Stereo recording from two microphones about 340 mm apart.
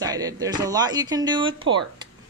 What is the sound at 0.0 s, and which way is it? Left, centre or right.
Speech, centre.